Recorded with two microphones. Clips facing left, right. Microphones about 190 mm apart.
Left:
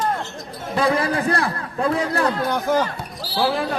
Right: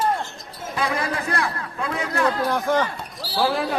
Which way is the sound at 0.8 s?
35° left (ahead or behind).